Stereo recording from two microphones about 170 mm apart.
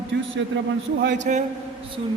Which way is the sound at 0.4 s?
90° right.